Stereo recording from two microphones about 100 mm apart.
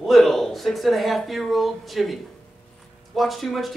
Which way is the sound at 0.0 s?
Centre (ahead or behind).